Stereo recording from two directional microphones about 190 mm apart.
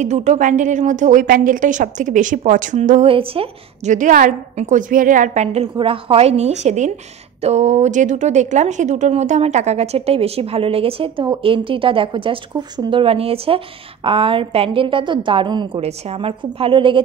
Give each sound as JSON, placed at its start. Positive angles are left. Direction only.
{"t": 0.0, "sound": "a woman's voice", "side_deg": -40}